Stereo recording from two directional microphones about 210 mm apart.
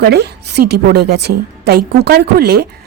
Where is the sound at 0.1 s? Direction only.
50° right (ahead or behind).